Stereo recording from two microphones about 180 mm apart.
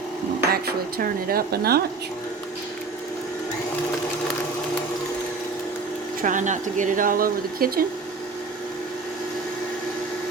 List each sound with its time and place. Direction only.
0.5 s speech: 55° right (ahead or behind)
6.2 s speech: 45° right (ahead or behind)